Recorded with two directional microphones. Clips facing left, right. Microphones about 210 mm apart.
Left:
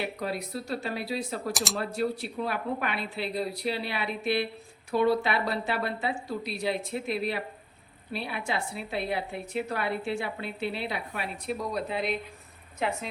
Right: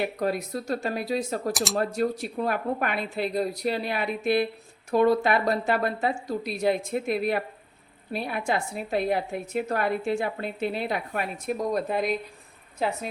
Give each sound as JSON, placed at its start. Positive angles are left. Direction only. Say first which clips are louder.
{"t": 0.0, "sound": "a woman's voice", "louder": "right 5 dB", "side_deg": -45}
{"t": 1.5, "sound": "speech", "louder": "right 5 dB", "side_deg": 0}
{"t": 1.8, "sound": "a woman's voice", "louder": "right 3 dB", "side_deg": -45}